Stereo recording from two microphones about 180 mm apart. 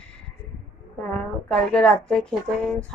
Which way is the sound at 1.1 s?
5° left (ahead or behind).